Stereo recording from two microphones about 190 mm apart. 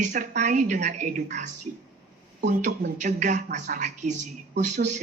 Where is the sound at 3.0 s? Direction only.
40° right (ahead or behind).